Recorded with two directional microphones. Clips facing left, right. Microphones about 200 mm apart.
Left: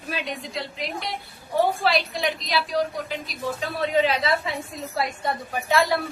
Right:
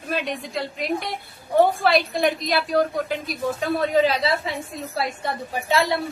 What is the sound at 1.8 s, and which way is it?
A woman's voice, 55° right (ahead or behind).